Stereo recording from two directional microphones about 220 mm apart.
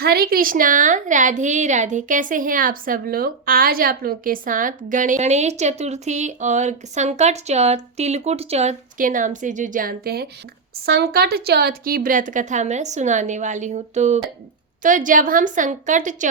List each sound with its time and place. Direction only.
0.0 s a woman's voice: 45° right (ahead or behind)